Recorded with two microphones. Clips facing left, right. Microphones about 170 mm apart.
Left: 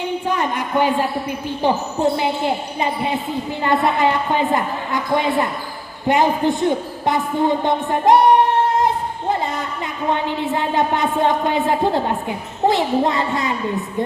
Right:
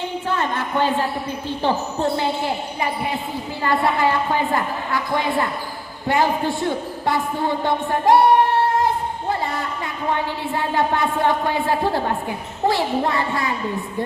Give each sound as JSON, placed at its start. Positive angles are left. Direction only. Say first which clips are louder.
{"t": 0.3, "sound": "a woman's voice", "louder": "even", "side_deg": 15}
{"t": 10.1, "sound": "a woman's voice", "louder": "left 3 dB", "side_deg": 20}